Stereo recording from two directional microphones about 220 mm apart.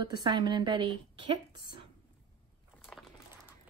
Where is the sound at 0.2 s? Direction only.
20° right (ahead or behind).